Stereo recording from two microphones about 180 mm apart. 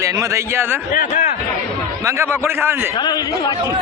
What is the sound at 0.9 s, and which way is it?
Speech, 45° left (ahead or behind).